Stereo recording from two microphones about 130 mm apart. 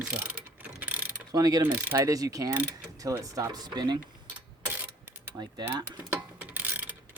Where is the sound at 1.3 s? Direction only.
30° right (ahead or behind).